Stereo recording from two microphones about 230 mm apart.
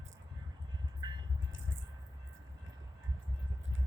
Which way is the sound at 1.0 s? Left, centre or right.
Centre.